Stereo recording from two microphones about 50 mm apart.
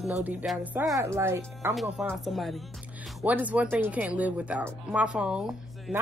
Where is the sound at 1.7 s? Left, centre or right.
Centre.